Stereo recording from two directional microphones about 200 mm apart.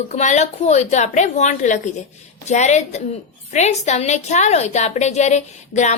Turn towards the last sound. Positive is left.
turn(degrees=35)  # may be behind; listen again after turning